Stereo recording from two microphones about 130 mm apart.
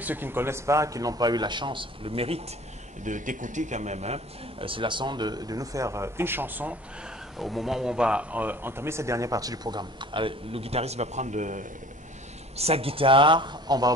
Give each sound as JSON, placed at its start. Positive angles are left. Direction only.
{"t": 0.0, "sound": "speech", "side_deg": -15}
{"t": 3.0, "sound": "speech", "side_deg": -75}
{"t": 7.3, "sound": "speech", "side_deg": 0}
{"t": 12.5, "sound": "speech", "side_deg": -50}